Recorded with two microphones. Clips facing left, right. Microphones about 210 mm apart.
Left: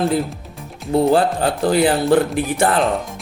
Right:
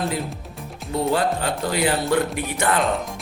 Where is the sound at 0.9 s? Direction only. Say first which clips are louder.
Left 6 dB; 30° left (ahead or behind).